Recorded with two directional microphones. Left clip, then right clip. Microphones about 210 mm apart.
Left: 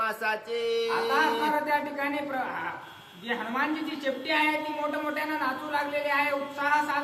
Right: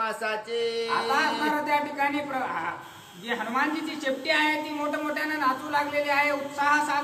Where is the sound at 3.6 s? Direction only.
15° right (ahead or behind).